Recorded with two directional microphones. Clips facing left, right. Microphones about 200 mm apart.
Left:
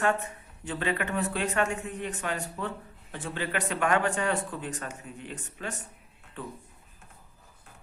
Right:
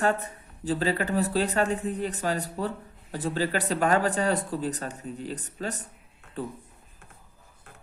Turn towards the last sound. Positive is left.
turn(degrees=-40)  # may be behind; listen again after turning